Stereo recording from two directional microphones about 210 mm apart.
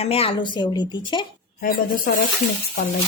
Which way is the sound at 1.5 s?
45° left (ahead or behind).